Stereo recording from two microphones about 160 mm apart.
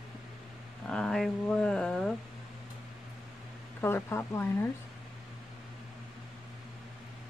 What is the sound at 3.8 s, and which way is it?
Speech, 15° left (ahead or behind).